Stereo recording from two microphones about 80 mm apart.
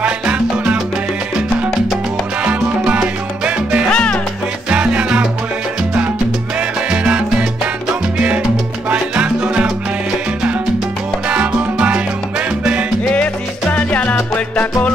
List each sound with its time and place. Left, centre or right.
0.0 s salsa music: centre
2.4 s salsa music: centre
3.9 s music: centre
4.6 s salsa music: centre
6.9 s salsa music: centre
9.1 s music: centre
11.2 s music: centre
13.1 s music: centre